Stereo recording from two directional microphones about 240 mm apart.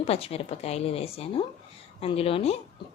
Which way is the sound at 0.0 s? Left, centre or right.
Left.